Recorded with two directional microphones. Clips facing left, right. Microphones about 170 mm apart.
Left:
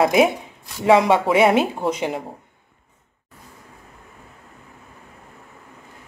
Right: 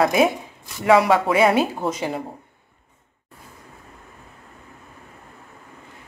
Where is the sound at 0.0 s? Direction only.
25° left (ahead or behind).